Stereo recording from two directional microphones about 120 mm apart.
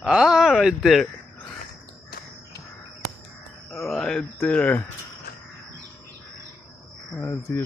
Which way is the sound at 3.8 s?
5° left (ahead or behind).